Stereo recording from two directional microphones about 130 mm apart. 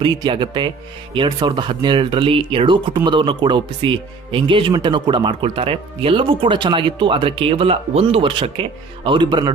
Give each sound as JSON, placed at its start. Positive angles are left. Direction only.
{"t": 0.0, "sound": "speech", "side_deg": -35}